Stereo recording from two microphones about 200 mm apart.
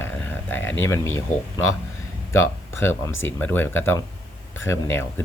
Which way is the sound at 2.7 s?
10° left (ahead or behind).